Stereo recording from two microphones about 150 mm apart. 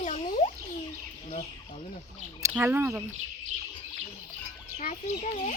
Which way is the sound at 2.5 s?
15° right (ahead or behind).